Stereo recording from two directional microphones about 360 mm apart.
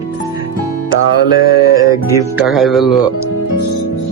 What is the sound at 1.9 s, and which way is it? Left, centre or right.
Music, centre.